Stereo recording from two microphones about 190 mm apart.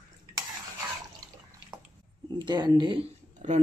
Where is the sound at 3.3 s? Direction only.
40° right (ahead or behind).